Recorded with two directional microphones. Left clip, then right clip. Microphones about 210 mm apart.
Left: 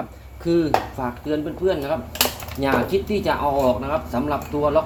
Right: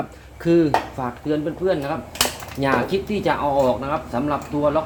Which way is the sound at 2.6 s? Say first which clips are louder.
Even; 25° right (ahead or behind).